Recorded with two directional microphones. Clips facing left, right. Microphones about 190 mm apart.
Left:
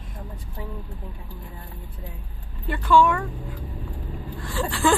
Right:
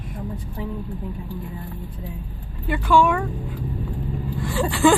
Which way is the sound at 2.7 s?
15° right (ahead or behind).